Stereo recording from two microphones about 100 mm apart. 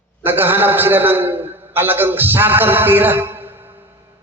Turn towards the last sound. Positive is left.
turn(degrees=-20)  # may be behind; listen again after turning